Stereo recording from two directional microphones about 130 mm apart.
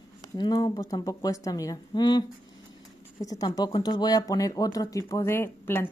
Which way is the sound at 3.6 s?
35° left (ahead or behind).